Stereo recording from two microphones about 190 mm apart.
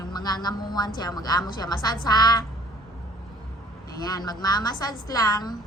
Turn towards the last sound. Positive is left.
turn(degrees=20)  # may be behind; listen again after turning